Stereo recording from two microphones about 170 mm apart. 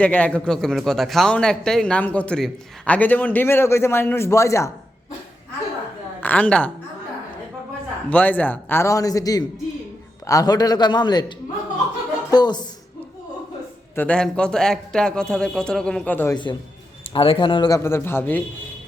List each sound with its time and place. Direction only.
0.0 s a man's voice: 10° left (ahead or behind)
6.1 s a woman's voice: 10° left (ahead or behind)
8.1 s a man's voice: 10° left (ahead or behind); by 12.6 s 25° left (ahead or behind)
13.9 s a man's voice: 10° left (ahead or behind)
16.3 s a man's voice: 25° left (ahead or behind); by 18.4 s 10° left (ahead or behind)